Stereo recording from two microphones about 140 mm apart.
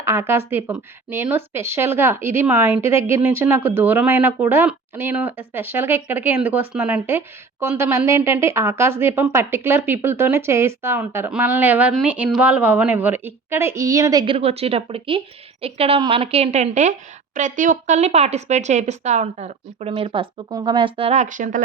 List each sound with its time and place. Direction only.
0.0 s speech: 20° right (ahead or behind)
14.3 s a woman's voice: 45° right (ahead or behind)
19.9 s speech: 40° right (ahead or behind)
20.5 s speech: 30° right (ahead or behind)
21.2 s speech: 65° right (ahead or behind)